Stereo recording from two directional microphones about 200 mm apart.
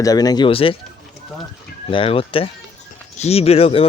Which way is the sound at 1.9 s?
25° left (ahead or behind).